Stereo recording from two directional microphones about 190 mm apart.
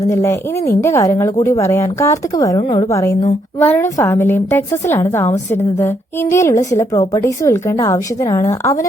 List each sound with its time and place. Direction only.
0.1 s a woman's voice: 15° left (ahead or behind)